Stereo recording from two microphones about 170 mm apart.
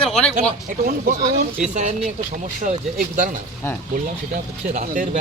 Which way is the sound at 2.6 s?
50° right (ahead or behind).